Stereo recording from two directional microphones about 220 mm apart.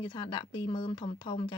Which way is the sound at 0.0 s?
20° left (ahead or behind).